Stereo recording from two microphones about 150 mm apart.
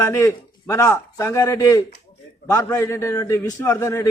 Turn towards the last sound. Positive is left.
turn(degrees=20)  # may be behind; listen again after turning